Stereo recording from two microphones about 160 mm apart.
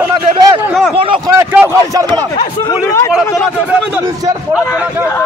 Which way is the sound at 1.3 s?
15° right (ahead or behind).